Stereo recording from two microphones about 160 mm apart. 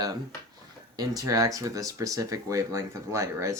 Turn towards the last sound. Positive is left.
turn(degrees=-20)  # may be behind; listen again after turning